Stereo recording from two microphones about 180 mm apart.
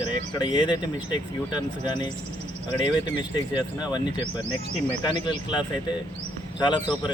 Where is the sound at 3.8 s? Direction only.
25° left (ahead or behind).